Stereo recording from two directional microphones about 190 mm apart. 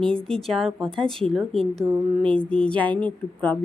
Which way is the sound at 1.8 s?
10° right (ahead or behind).